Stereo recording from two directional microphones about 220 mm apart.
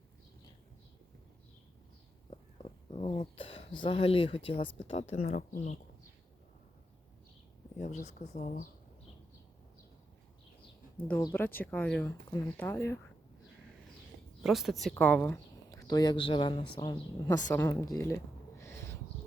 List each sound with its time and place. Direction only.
2.3 s a sound: 25° left (ahead or behind)
4.8 s speech: 30° left (ahead or behind)
7.8 s speech: 30° left (ahead or behind)
11.2 s speech: 10° left (ahead or behind)
14.4 s a woman's voice: centre (ahead or behind)